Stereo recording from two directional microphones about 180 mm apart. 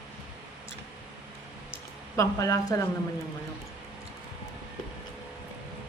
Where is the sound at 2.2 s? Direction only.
15° left (ahead or behind).